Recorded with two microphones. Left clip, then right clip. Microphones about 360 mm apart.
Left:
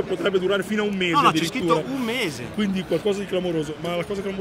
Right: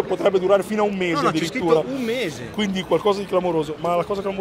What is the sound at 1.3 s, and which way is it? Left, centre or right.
A man's voice, centre.